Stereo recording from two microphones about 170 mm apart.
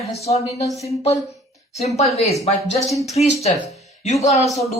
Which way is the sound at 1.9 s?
40° left (ahead or behind).